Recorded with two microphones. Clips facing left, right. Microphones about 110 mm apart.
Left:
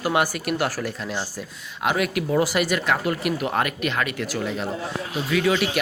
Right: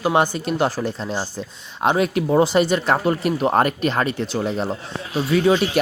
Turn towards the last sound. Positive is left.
turn(degrees=-30)  # may be behind; listen again after turning